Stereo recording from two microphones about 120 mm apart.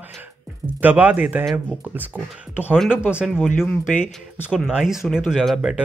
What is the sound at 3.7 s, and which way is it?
Speech, 15° left (ahead or behind).